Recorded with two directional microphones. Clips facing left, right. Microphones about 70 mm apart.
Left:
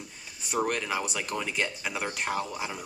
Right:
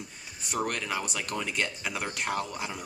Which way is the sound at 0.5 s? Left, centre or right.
Centre.